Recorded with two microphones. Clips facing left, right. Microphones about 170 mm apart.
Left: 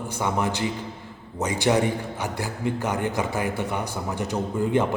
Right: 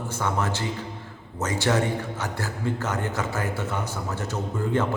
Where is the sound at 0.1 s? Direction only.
15° left (ahead or behind).